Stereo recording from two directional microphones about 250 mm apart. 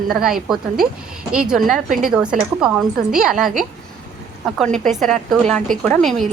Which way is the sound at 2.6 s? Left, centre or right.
Centre.